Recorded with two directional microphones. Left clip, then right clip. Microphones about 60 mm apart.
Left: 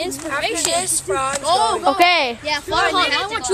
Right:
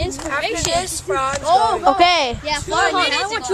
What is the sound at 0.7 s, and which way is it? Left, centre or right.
Speech, right.